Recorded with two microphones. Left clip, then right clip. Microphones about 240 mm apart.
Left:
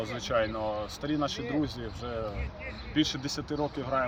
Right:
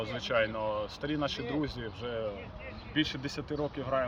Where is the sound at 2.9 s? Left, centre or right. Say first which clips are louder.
Left 3 dB; centre.